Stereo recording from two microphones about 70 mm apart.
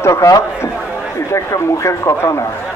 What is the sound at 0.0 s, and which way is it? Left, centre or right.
Speech, left.